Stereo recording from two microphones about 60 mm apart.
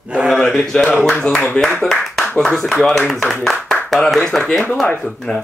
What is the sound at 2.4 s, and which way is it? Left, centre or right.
Speech, centre.